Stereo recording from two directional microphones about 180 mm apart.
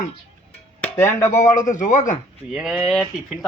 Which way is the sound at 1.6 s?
45° left (ahead or behind).